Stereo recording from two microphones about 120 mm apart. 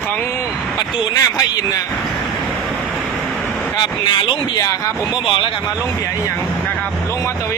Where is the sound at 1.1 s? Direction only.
30° left (ahead or behind).